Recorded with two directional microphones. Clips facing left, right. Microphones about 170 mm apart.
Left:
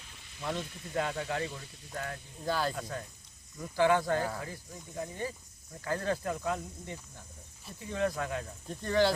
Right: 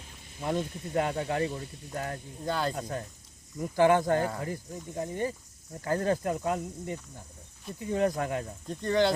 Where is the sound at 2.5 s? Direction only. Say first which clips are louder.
Right 1 dB; centre (ahead or behind).